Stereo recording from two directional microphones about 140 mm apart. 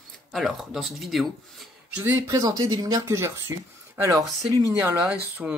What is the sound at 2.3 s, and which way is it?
Speech, 25° right (ahead or behind).